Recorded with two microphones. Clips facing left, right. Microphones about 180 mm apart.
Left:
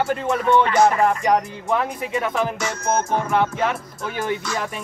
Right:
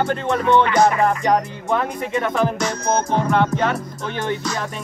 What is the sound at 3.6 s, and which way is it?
Speech, 5° left (ahead or behind).